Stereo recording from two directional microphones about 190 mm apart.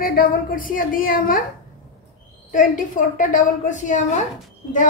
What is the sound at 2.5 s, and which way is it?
A woman's voice, 45° left (ahead or behind).